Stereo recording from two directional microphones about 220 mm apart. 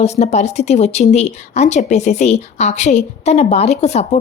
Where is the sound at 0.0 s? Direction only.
30° left (ahead or behind).